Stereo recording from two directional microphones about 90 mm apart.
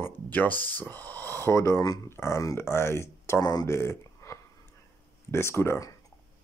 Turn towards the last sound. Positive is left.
turn(degrees=30)  # may be behind; listen again after turning